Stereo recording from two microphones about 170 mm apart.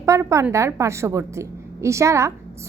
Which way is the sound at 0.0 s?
15° right (ahead or behind).